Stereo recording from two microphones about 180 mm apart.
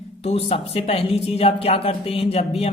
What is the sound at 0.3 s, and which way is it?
Speech, 35° left (ahead or behind).